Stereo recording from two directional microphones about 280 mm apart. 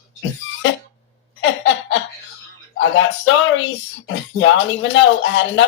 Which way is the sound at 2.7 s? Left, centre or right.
Left.